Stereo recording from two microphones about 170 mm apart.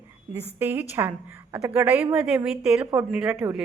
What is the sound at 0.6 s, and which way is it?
A woman's voice, 10° right (ahead or behind).